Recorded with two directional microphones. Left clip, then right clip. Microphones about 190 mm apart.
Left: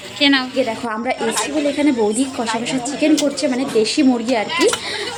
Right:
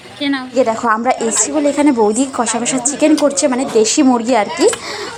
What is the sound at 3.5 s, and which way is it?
Speech, 10° right (ahead or behind).